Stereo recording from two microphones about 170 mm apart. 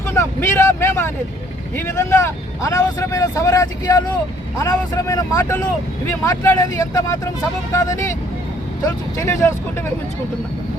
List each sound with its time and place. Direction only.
0.1 s speech: 15° left (ahead or behind)